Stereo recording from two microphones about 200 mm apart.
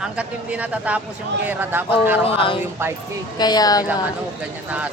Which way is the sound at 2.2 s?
25° left (ahead or behind).